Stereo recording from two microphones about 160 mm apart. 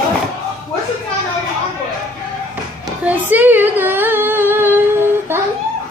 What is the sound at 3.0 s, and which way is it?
Singing, 10° right (ahead or behind).